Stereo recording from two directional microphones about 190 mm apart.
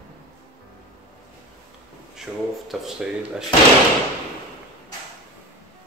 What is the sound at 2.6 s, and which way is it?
Speech, 5° right (ahead or behind).